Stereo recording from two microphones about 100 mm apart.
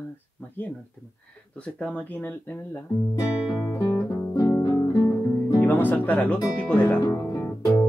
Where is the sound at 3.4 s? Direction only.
10° right (ahead or behind).